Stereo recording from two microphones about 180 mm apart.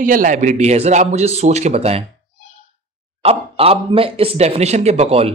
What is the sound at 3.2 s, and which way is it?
Speech, 35° right (ahead or behind).